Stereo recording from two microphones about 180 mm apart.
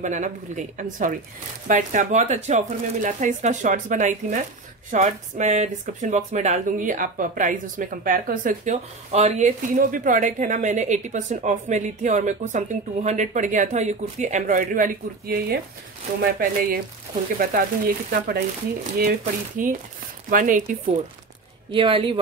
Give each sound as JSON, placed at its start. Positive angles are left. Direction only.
{"t": 0.0, "sound": "speech", "side_deg": -45}
{"t": 19.6, "sound": "speech", "side_deg": -45}
{"t": 21.7, "sound": "speech", "side_deg": -30}